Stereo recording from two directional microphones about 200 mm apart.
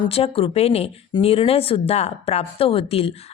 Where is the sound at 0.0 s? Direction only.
30° left (ahead or behind).